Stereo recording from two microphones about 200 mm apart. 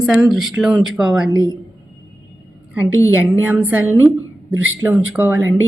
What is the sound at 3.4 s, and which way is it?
Speech, 10° right (ahead or behind).